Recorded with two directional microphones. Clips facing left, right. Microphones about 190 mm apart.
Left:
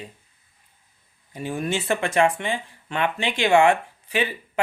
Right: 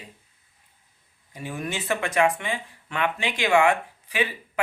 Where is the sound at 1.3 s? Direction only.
30° left (ahead or behind).